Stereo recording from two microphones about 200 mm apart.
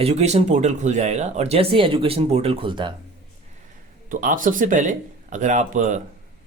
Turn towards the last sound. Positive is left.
turn(degrees=-40)  # may be behind; listen again after turning